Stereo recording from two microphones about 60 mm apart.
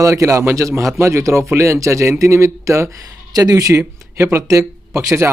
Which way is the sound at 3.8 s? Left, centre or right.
Right.